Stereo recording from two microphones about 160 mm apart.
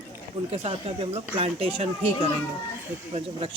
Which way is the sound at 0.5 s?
40° right (ahead or behind).